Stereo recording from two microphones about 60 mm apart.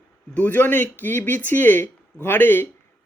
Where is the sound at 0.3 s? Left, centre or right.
Left.